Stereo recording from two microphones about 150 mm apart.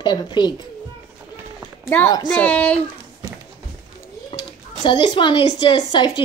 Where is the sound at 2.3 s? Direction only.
10° left (ahead or behind).